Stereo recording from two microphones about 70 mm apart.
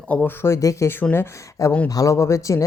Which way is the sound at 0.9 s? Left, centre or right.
Left.